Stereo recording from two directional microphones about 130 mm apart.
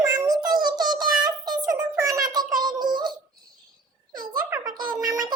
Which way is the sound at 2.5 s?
35° right (ahead or behind).